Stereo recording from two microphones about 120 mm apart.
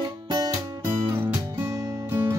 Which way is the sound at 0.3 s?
30° right (ahead or behind).